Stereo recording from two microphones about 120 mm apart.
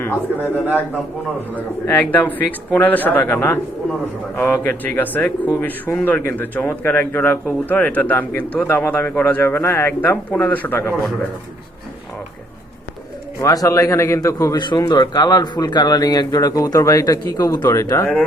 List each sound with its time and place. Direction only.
0.0 s a man's voice: 15° left (ahead or behind)
13.4 s a man's voice: 30° left (ahead or behind)
14.6 s speech: 35° left (ahead or behind)